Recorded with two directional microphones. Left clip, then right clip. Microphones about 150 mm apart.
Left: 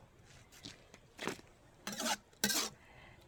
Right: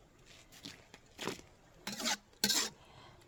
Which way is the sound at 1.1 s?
25° right (ahead or behind).